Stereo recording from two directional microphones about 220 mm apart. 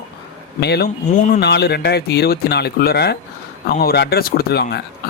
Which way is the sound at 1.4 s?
50° left (ahead or behind).